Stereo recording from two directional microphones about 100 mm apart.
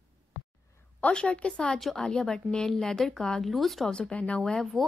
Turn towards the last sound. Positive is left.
turn(degrees=5)  # may be behind; listen again after turning